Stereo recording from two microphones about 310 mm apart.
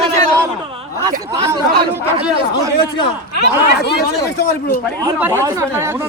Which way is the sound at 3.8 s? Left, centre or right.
Left.